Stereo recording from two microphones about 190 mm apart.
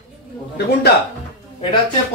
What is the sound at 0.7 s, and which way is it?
Speech, 55° left (ahead or behind).